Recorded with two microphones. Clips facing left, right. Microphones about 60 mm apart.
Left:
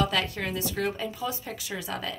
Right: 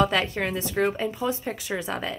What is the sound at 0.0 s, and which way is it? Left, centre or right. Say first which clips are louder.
Speech: right 4 dB; right.